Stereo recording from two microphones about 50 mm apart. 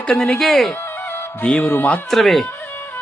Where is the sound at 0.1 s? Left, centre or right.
Centre.